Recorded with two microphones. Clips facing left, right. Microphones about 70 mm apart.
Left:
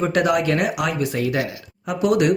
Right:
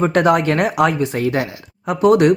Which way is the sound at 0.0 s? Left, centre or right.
Right.